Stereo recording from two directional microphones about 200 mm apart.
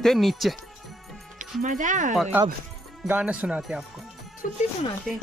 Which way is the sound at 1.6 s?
40° right (ahead or behind).